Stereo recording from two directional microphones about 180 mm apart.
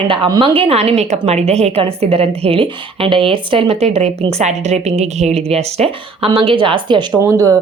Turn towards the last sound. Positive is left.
turn(degrees=-15)  # may be behind; listen again after turning